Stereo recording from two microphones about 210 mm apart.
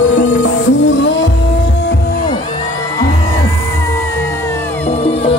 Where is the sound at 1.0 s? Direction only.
60° left (ahead or behind).